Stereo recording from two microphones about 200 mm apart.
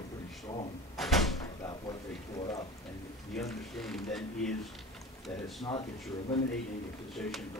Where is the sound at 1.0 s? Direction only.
Centre (ahead or behind).